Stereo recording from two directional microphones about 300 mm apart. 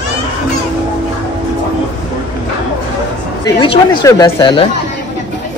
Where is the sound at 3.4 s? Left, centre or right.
Centre.